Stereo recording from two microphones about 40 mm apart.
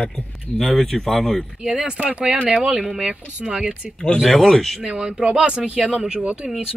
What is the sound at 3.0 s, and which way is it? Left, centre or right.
Speech, right.